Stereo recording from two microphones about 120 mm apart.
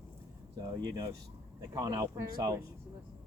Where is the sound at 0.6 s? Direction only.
35° right (ahead or behind).